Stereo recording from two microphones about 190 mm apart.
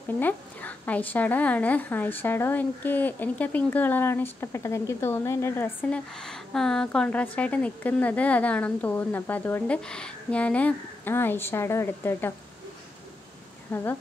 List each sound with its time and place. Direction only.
0.2 s a woman's voice: 10° left (ahead or behind)
13.7 s a woman's voice: 10° left (ahead or behind)